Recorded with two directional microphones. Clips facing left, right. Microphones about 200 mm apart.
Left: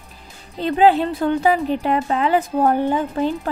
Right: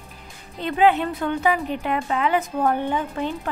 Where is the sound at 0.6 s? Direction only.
35° left (ahead or behind).